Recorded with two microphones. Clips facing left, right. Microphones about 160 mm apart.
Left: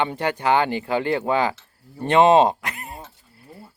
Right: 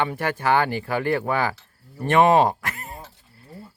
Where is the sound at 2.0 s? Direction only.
25° left (ahead or behind).